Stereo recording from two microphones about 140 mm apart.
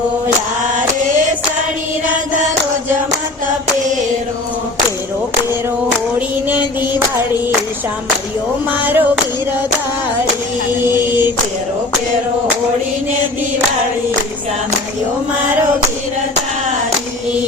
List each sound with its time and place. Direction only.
8.8 s clapping: 15° right (ahead or behind)
10.9 s chant: 30° left (ahead or behind)